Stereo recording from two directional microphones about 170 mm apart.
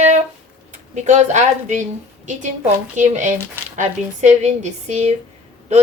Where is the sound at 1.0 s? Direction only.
45° right (ahead or behind).